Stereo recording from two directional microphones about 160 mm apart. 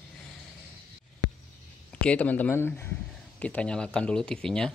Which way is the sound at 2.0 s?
10° left (ahead or behind).